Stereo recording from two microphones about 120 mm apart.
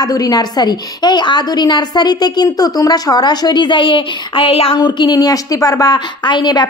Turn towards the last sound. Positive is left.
turn(degrees=35)  # may be behind; listen again after turning